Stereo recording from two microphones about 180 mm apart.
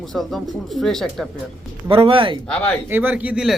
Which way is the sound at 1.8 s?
30° right (ahead or behind).